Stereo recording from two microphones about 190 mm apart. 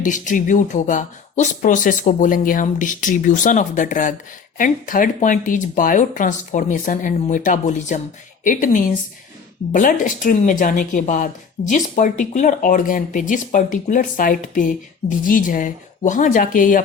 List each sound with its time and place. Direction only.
0.0 s speech: 40° left (ahead or behind)